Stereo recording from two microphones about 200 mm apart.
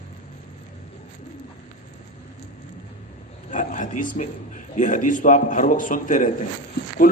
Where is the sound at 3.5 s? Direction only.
40° left (ahead or behind).